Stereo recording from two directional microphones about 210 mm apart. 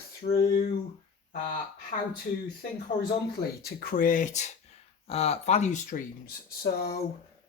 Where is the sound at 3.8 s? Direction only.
45° left (ahead or behind).